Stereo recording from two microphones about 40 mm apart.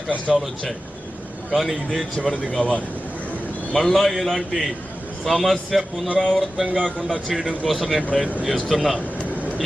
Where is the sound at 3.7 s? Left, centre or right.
Centre.